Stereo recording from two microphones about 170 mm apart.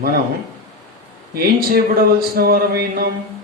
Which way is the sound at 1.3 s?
60° right (ahead or behind).